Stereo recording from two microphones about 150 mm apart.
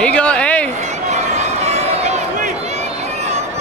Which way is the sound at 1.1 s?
50° right (ahead or behind).